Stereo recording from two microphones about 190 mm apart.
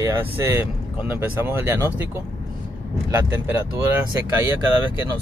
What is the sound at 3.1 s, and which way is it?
Speech, 10° right (ahead or behind).